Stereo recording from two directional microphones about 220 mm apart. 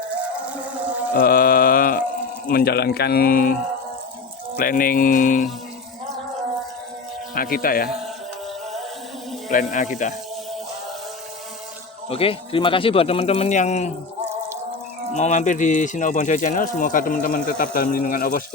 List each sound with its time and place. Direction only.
0.4 s a sound: 5° right (ahead or behind)
1.1 s mantra: 40° left (ahead or behind)
2.5 s speech: 45° left (ahead or behind)
7.3 s speech: 40° left (ahead or behind)
9.5 s speech: 35° left (ahead or behind)
12.0 s speech: 25° left (ahead or behind)
15.1 s speech: 35° left (ahead or behind)